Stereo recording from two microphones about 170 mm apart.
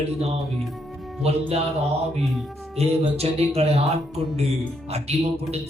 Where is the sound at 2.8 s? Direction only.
35° right (ahead or behind).